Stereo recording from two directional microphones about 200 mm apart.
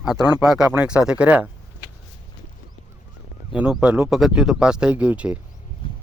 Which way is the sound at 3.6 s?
5° right (ahead or behind).